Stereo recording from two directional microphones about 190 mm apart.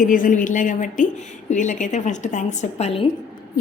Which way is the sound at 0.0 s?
45° left (ahead or behind).